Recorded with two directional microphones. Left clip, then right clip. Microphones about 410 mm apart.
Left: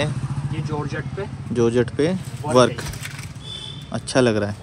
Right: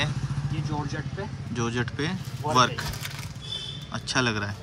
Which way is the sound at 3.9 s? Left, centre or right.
Centre.